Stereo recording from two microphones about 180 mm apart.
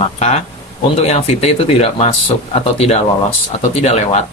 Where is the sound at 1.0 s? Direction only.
35° left (ahead or behind).